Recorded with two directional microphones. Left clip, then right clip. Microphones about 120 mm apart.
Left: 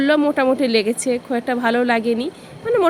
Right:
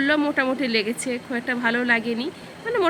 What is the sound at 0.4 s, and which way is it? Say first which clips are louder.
Speech: left 6 dB; 25° left (ahead or behind).